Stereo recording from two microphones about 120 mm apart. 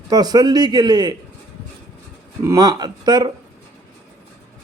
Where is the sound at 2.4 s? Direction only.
30° right (ahead or behind).